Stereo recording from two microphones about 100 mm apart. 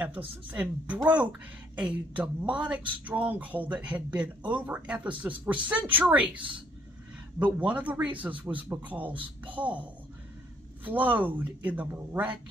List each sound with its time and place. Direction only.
0.5 s speech: 15° right (ahead or behind)
10.8 s speech: 15° right (ahead or behind)